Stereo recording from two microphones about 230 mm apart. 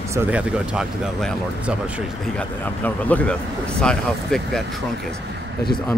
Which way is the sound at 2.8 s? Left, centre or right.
Centre.